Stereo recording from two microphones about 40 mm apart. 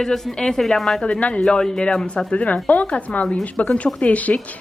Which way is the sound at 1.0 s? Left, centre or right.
Left.